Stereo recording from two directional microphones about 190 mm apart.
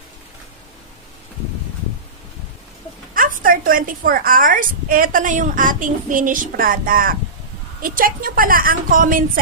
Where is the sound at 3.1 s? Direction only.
45° right (ahead or behind).